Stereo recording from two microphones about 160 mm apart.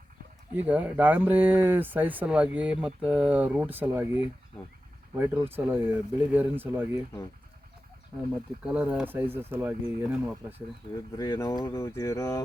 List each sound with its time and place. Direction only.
0.5 s speech: 10° right (ahead or behind)
8.6 s speech: 10° right (ahead or behind)
11.2 s speech: 20° left (ahead or behind)